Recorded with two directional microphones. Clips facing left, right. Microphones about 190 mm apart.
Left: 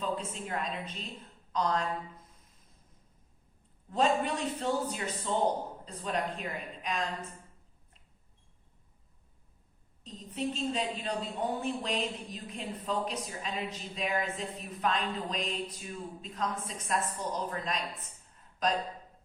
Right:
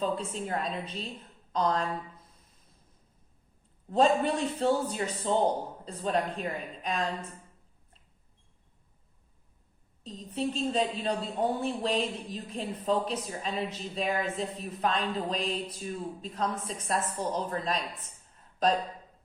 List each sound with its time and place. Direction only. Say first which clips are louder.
0.0 s a woman's voice: right 4 dB; 35° right (ahead or behind)
3.8 s a woman's voice: right 4 dB; 35° right (ahead or behind)
10.0 s a woman's voice: right 3 dB; 35° right (ahead or behind)